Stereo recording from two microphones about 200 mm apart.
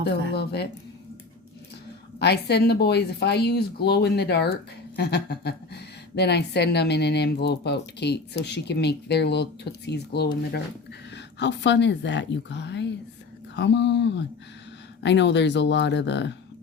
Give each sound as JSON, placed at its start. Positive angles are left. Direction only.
{"t": 0.3, "sound": "a woman's voice", "side_deg": 55}
{"t": 2.1, "sound": "a woman's voice", "side_deg": 55}